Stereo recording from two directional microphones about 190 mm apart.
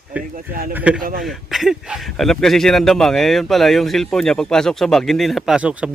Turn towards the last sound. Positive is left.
turn(degrees=-5)  # may be behind; listen again after turning